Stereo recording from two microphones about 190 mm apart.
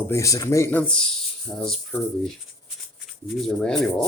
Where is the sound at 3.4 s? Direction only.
5° left (ahead or behind).